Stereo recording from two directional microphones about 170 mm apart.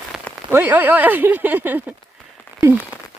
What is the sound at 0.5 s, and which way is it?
Speech, 10° right (ahead or behind).